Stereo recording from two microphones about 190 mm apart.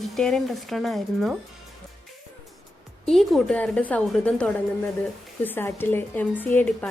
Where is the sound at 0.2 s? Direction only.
Centre (ahead or behind).